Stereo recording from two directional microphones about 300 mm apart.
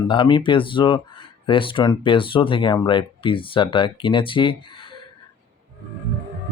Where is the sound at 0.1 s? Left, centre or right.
Centre.